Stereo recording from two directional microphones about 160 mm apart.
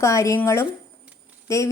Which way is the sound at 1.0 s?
10° right (ahead or behind).